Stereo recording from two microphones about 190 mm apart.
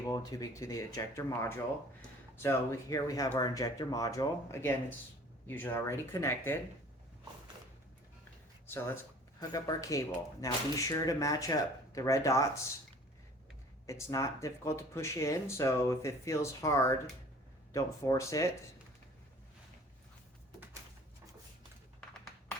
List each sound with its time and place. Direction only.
0.0 s speech: 20° left (ahead or behind)
8.6 s speech: 10° left (ahead or behind)
13.8 s speech: 15° left (ahead or behind)